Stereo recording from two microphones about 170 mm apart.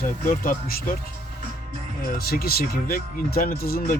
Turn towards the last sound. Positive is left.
turn(degrees=60)  # may be behind; listen again after turning